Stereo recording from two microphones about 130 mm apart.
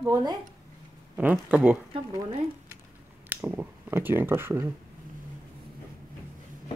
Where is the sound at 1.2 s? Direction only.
10° right (ahead or behind).